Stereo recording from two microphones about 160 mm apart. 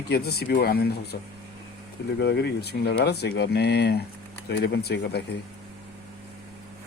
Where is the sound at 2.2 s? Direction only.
90° left.